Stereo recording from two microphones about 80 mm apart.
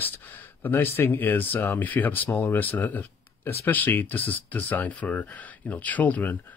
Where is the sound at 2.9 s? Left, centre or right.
Left.